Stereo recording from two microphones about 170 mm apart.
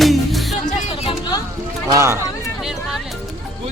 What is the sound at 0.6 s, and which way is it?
Music, 45° left (ahead or behind).